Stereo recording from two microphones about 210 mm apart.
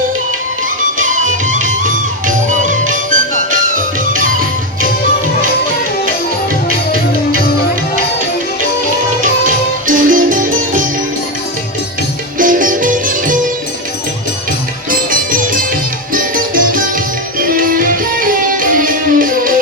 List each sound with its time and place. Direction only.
0.9 s music: 35° right (ahead or behind)
9.8 s music: 40° right (ahead or behind)
12.4 s music: 40° right (ahead or behind)
14.8 s music: 40° right (ahead or behind)